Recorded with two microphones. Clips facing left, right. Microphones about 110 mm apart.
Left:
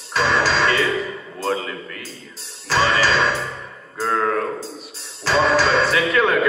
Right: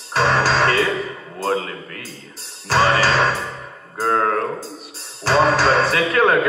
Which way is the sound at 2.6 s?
50° right (ahead or behind).